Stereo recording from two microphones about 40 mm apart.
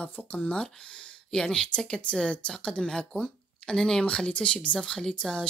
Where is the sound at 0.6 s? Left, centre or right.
Left.